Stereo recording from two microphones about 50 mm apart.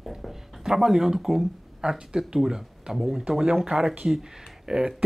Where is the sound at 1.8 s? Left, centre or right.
Centre.